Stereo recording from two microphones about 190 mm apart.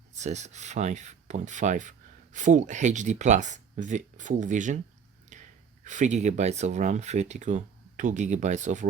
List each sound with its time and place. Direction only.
0.2 s speech: 35° right (ahead or behind)